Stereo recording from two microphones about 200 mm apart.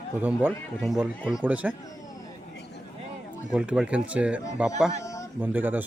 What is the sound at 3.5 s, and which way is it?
Speech, 5° right (ahead or behind).